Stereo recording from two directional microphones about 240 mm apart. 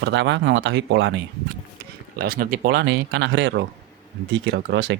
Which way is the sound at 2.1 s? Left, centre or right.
Right.